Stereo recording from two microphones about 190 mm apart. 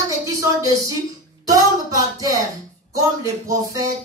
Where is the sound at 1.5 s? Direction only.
20° right (ahead or behind).